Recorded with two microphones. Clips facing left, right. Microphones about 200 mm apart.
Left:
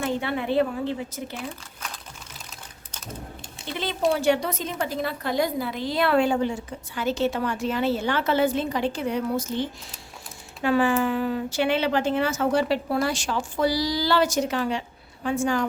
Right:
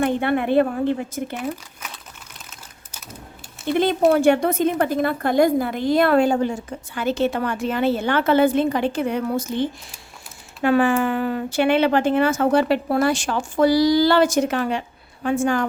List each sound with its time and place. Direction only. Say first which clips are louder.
0.0 s speech: right 6 dB; 55° right (ahead or behind)
3.6 s speech: right 8 dB; 55° right (ahead or behind)